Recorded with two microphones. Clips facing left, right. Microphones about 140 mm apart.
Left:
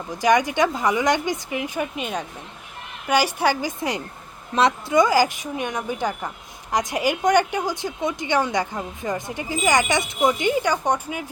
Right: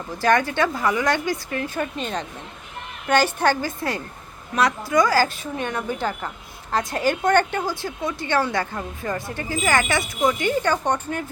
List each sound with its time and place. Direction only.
0.2 s a woman's voice: 15° left (ahead or behind)